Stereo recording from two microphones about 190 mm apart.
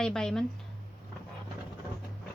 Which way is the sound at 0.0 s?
5° left (ahead or behind).